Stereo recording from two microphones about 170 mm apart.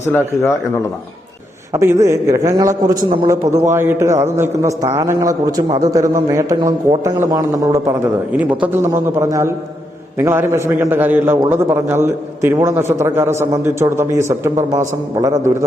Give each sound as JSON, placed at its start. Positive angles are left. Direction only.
{"t": 0.1, "sound": "speech", "side_deg": 10}
{"t": 1.7, "sound": "a man's voice", "side_deg": -15}
{"t": 8.3, "sound": "a man's voice", "side_deg": -10}